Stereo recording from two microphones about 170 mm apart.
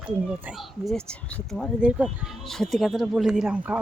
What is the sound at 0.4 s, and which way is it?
Speech, centre (ahead or behind).